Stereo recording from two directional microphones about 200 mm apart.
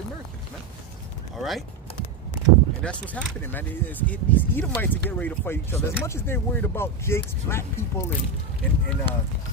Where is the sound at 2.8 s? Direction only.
10° left (ahead or behind).